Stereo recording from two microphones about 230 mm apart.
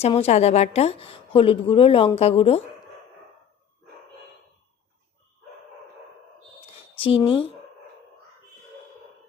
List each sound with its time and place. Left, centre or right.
0.0 s a woman's voice: left
7.0 s a woman's voice: left